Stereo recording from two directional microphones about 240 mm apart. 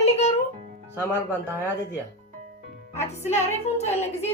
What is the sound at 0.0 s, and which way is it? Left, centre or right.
Music, left.